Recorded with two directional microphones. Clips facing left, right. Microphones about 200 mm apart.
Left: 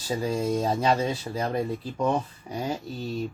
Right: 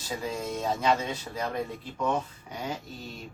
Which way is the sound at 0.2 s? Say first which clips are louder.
Left 7 dB; 35° left (ahead or behind).